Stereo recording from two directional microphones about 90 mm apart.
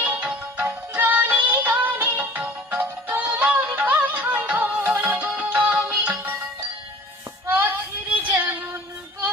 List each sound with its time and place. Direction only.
0.0 s music: 15° right (ahead or behind)
7.4 s child singing: 20° right (ahead or behind)
8.2 s female singing: 20° right (ahead or behind)